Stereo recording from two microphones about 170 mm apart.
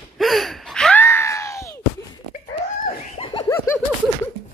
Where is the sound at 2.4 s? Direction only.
50° left (ahead or behind).